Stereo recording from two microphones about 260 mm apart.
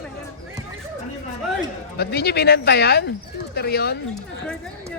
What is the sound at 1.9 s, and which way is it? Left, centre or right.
Speech, left.